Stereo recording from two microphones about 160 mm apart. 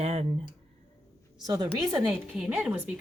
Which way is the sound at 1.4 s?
25° right (ahead or behind).